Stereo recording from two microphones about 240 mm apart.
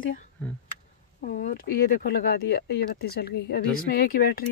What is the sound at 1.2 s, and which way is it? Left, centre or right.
Speech, left.